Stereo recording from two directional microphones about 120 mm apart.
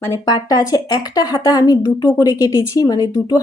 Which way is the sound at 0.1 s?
35° left (ahead or behind).